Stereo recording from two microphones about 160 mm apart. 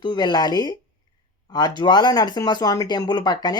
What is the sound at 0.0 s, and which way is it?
Speech, 25° left (ahead or behind).